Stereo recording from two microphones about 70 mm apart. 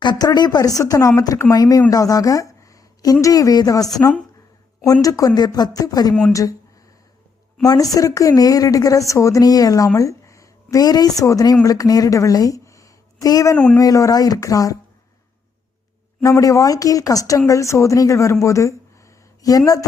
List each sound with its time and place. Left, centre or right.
0.0 s speech: left
5.3 s speech: left
7.6 s a woman's voice: left
16.2 s speech: left
18.4 s a sound: left